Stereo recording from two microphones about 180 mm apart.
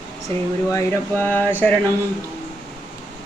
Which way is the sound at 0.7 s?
10° left (ahead or behind).